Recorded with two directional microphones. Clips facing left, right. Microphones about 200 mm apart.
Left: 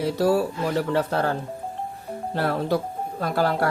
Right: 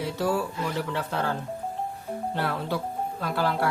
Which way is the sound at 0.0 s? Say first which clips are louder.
Left 6 dB; 40° left (ahead or behind).